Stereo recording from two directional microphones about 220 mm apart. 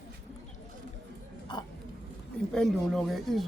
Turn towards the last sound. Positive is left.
turn(degrees=0)  # may be behind; listen again after turning